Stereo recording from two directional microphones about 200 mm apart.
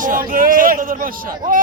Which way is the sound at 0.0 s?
45° right (ahead or behind).